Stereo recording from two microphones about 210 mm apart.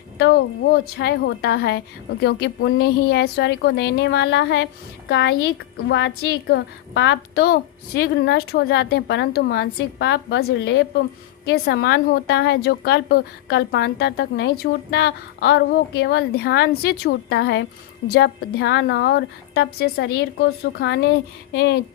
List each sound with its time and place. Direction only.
0.2 s a woman's voice: 50° left (ahead or behind)